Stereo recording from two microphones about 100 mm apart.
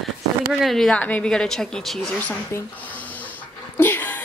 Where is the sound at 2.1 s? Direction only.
15° left (ahead or behind).